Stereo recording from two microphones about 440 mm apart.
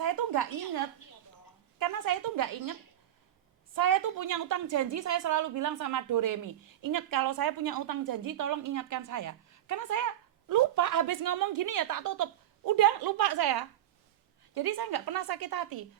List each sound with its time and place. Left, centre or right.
0.0 s a sound: right
1.8 s a woman's voice: right
3.8 s a woman's voice: right
14.8 s a woman's voice: right